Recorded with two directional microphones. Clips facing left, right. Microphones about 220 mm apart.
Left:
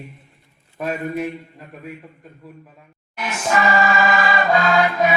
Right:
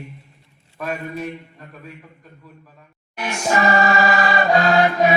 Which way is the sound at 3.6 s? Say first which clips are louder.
Right 1 dB; 40° right (ahead or behind).